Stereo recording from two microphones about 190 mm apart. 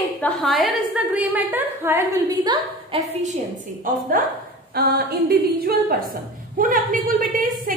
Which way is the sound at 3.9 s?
45° right (ahead or behind).